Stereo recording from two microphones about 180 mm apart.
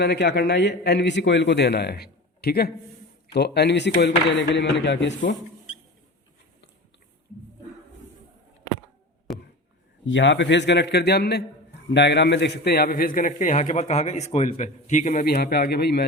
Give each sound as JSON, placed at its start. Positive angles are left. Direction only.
{"t": 0.0, "sound": "a man's voice", "side_deg": 70}
{"t": 10.1, "sound": "a man's voice", "side_deg": 90}